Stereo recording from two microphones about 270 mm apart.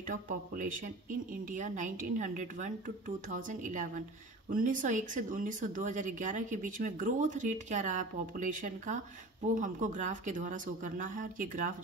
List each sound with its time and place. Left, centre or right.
0.1 s speech: right